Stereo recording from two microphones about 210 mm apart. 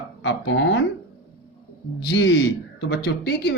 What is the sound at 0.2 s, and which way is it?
Speech, 60° left (ahead or behind).